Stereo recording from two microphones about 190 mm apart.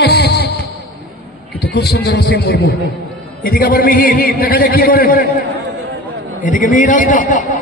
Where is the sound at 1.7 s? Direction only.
60° left (ahead or behind).